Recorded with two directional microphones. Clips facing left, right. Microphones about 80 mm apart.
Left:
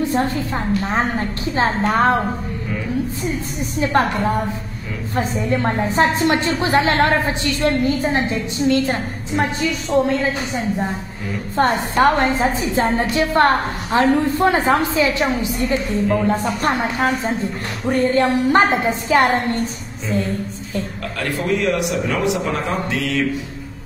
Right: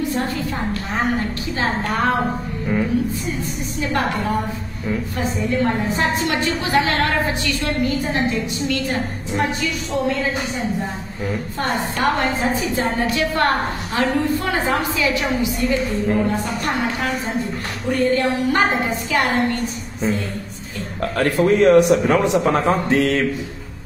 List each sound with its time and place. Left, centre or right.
0.0 s a woman's voice: left
3.9 s a woman's voice: left
5.1 s a woman's voice: left
11.5 s a woman's voice: left
21.0 s a man's voice: right